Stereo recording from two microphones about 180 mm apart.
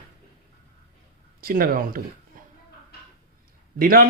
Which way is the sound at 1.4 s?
55° right (ahead or behind).